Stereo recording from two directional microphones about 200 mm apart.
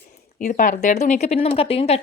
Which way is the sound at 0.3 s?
40° left (ahead or behind).